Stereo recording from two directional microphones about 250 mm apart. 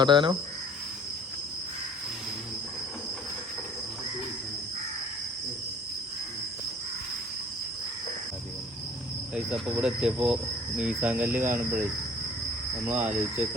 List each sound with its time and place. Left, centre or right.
0.0 s speech: centre
9.3 s cricket: centre
12.9 s cricket: centre